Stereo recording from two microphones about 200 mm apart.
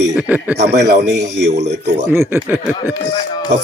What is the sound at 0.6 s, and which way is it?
Music, 55° right (ahead or behind).